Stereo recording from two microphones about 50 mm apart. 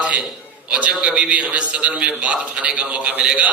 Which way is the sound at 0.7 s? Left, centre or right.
Right.